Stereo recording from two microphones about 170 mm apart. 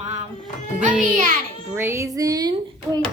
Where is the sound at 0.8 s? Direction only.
45° right (ahead or behind).